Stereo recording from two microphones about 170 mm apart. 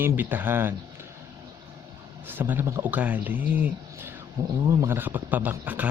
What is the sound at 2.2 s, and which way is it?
Speech, 10° right (ahead or behind).